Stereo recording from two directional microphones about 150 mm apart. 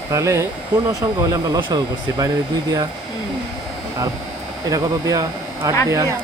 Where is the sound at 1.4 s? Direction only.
25° right (ahead or behind).